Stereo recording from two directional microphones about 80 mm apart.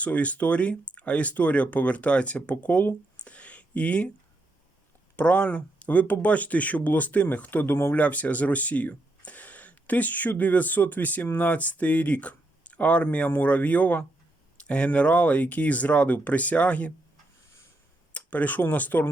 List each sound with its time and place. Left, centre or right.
0.0 s speech: centre
5.1 s speech: centre
8.0 s speech: centre
18.1 s speech: centre